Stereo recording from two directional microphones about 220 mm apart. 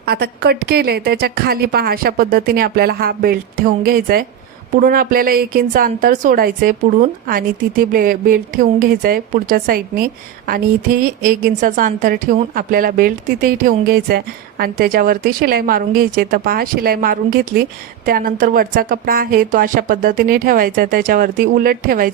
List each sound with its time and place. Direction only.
0.0 s a woman's voice: 45° right (ahead or behind)